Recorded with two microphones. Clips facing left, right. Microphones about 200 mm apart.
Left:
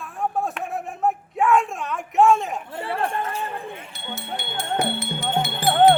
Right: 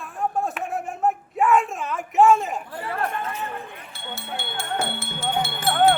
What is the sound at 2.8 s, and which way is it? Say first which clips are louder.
Speech: left 3 dB; 30° left (ahead or behind).